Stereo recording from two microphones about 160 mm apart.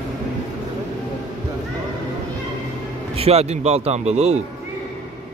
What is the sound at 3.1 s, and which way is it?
Speech, 40° right (ahead or behind).